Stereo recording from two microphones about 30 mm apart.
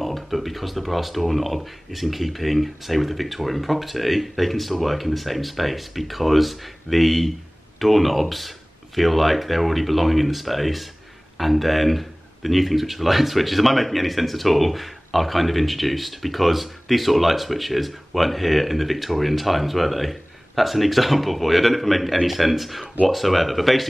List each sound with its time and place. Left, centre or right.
0.0 s speech: centre